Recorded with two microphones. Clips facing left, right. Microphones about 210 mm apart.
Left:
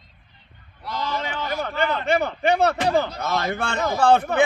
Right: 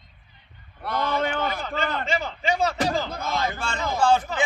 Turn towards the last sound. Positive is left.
turn(degrees=60)  # may be behind; listen again after turning